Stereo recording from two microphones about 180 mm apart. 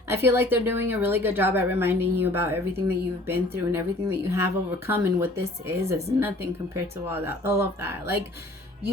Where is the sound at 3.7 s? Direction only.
15° right (ahead or behind).